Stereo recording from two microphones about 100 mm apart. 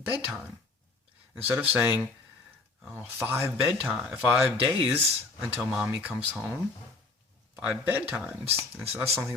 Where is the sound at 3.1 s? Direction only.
25° right (ahead or behind).